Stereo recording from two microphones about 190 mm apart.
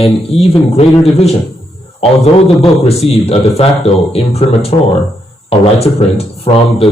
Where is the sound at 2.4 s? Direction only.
30° left (ahead or behind).